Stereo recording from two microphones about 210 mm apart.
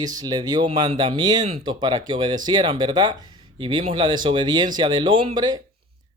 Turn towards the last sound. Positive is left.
turn(degrees=-20)  # may be behind; listen again after turning